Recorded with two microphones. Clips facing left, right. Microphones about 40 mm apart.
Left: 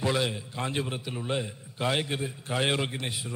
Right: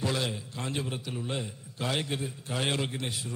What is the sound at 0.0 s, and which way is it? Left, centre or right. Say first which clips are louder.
A man's voice: left 3 dB; centre.